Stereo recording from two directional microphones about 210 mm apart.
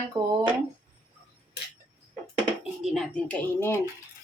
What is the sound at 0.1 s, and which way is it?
Speech, 20° right (ahead or behind).